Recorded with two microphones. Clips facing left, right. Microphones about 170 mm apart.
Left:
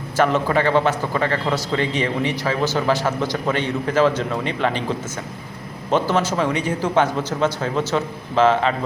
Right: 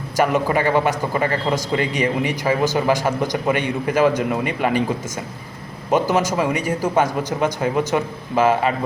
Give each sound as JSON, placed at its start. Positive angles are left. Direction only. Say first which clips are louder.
{"t": 0.2, "sound": "a man's voice", "louder": "even", "side_deg": -10}
{"t": 5.9, "sound": "a man's voice", "louder": "right 1 dB", "side_deg": -10}